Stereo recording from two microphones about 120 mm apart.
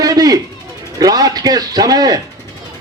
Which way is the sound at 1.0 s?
30° right (ahead or behind).